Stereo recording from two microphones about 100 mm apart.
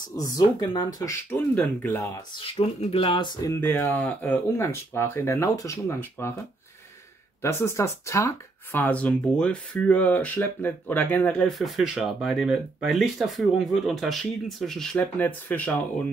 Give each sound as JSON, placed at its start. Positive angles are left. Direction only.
{"t": 0.1, "sound": "speech", "side_deg": 40}
{"t": 1.3, "sound": "speech", "side_deg": 15}
{"t": 2.4, "sound": "speech", "side_deg": 70}
{"t": 3.6, "sound": "speech", "side_deg": 25}
{"t": 5.9, "sound": "speech", "side_deg": 20}
{"t": 7.4, "sound": "speech", "side_deg": 25}
{"t": 8.7, "sound": "speech", "side_deg": 15}
{"t": 11.4, "sound": "speech", "side_deg": 0}
{"t": 15.0, "sound": "speech", "side_deg": 20}